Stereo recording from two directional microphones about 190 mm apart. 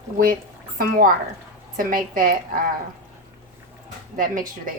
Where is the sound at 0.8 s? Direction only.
45° right (ahead or behind).